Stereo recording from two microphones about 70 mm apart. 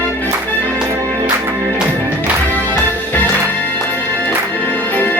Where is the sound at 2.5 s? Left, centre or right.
Left.